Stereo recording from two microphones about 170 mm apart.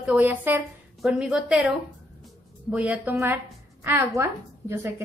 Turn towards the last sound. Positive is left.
turn(degrees=-15)  # may be behind; listen again after turning